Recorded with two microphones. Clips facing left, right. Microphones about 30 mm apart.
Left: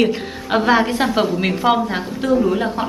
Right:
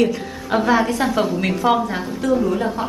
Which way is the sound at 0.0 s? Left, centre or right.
Left.